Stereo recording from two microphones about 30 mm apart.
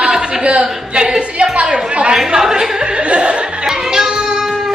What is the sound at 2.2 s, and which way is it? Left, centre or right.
Speech, centre.